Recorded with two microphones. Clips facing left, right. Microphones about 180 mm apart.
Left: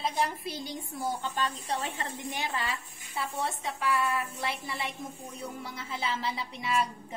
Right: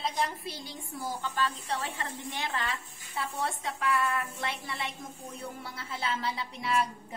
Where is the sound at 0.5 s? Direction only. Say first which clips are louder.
Left 4 dB; 20° left (ahead or behind).